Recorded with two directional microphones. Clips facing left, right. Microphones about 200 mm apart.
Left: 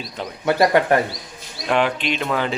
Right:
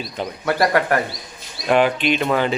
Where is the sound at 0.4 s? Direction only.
20° left (ahead or behind).